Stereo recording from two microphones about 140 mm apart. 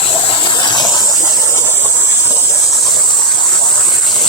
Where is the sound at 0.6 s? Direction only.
30° left (ahead or behind).